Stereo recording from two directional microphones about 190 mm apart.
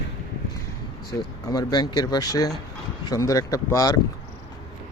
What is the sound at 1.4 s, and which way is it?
Speech, 20° left (ahead or behind).